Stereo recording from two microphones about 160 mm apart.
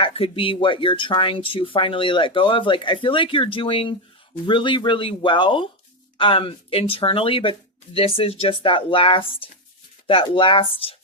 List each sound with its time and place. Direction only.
0.0 s speech: 35° left (ahead or behind)